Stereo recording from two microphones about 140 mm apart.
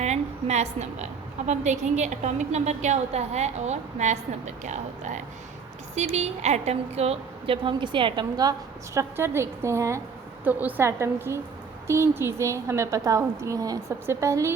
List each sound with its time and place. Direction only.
0.0 s a woman's voice: 55° right (ahead or behind); by 8.5 s 30° right (ahead or behind)
9.0 s a woman's voice: 15° right (ahead or behind)